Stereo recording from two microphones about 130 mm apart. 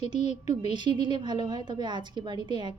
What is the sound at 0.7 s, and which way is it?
A woman's voice, 35° right (ahead or behind).